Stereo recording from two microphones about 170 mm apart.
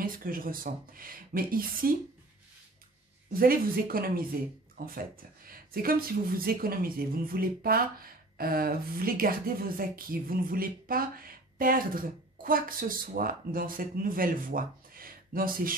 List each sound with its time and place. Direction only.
0.0 s speech: 55° right (ahead or behind)
3.3 s speech: 60° right (ahead or behind)